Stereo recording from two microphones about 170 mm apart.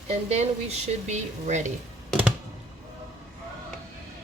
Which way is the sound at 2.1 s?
5° right (ahead or behind).